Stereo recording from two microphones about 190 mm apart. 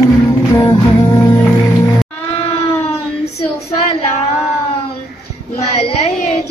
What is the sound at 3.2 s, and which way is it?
Child singing, 35° left (ahead or behind).